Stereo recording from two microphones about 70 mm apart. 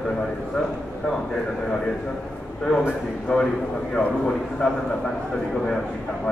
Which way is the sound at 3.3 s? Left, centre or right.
Centre.